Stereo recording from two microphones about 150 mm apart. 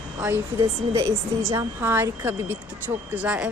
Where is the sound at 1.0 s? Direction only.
20° right (ahead or behind).